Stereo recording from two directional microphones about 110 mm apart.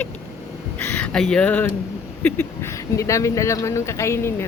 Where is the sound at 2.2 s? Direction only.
25° left (ahead or behind).